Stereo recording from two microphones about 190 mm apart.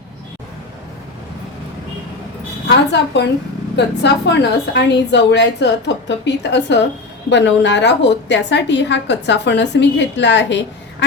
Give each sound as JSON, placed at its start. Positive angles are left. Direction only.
{"t": 3.1, "sound": "a woman's voice", "side_deg": 65}